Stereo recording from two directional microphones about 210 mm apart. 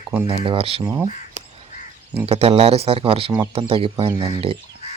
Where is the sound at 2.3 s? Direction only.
30° right (ahead or behind).